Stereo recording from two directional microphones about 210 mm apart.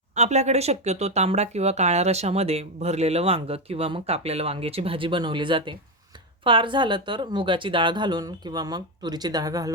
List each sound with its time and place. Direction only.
0.1 s speech: 35° right (ahead or behind); by 9.7 s 15° right (ahead or behind)